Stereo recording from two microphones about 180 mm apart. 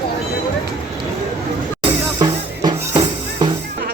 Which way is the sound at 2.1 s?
20° right (ahead or behind).